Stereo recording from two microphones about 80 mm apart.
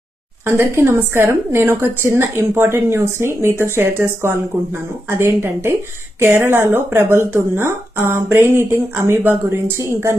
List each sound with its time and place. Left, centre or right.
0.4 s speech: right